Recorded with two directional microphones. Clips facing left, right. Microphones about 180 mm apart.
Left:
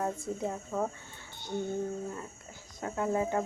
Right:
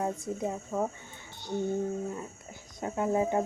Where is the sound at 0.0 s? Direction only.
10° right (ahead or behind).